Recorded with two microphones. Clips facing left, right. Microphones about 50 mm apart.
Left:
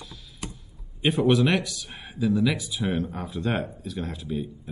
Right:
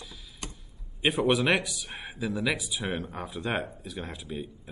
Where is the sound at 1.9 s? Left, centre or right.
Right.